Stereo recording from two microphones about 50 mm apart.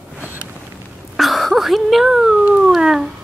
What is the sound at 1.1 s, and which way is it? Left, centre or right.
Whimper, centre.